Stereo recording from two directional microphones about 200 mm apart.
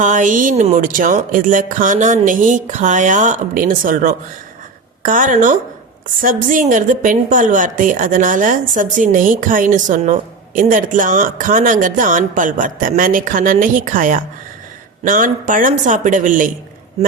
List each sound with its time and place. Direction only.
0.0 s a woman's voice: 40° right (ahead or behind)